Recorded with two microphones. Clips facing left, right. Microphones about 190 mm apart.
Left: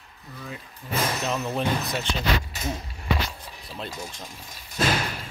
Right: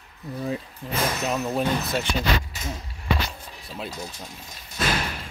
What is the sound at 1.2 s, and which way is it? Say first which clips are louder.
Speech: right 2 dB; 10° right (ahead or behind).